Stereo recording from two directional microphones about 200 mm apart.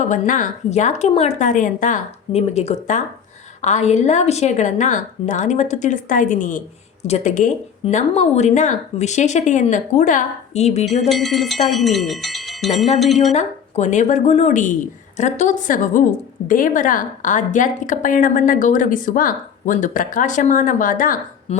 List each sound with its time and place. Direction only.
0.0 s a woman's voice: 40° left (ahead or behind)
11.1 s speech: centre (ahead or behind)
13.3 s a woman's voice: 35° left (ahead or behind)